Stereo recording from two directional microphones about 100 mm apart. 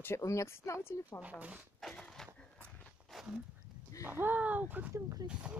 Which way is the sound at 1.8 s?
5° left (ahead or behind).